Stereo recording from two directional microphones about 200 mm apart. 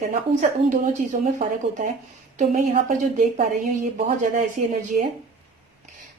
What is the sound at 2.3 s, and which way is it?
Speech, 35° right (ahead or behind).